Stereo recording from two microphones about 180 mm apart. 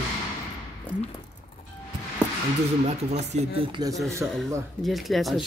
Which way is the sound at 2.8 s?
40° right (ahead or behind).